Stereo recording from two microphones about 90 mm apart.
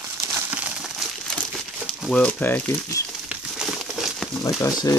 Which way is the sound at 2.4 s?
25° left (ahead or behind).